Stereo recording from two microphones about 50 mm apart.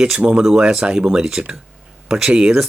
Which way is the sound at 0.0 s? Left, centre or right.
Right.